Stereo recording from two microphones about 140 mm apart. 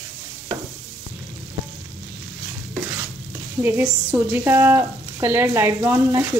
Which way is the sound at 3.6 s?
15° right (ahead or behind).